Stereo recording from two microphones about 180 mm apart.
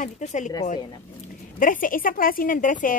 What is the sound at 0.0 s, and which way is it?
Speech, 40° left (ahead or behind).